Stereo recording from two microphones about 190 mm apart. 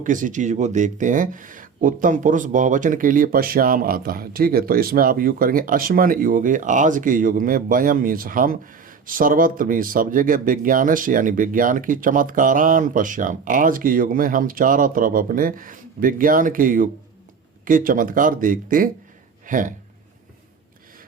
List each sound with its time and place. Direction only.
0.0 s speech: 45° right (ahead or behind)